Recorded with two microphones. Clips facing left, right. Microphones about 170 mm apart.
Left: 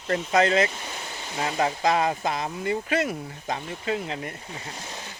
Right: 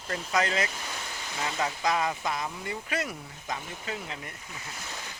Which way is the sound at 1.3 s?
35° left (ahead or behind).